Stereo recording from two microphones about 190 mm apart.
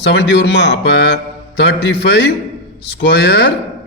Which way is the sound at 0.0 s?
65° left (ahead or behind).